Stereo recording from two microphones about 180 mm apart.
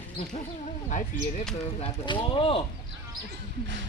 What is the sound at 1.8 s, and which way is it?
Speech, 30° left (ahead or behind).